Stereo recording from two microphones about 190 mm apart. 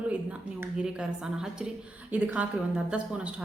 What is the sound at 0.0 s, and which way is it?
A woman's voice, 5° right (ahead or behind).